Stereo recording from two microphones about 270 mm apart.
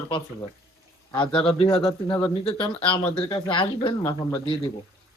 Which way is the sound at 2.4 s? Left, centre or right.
Centre.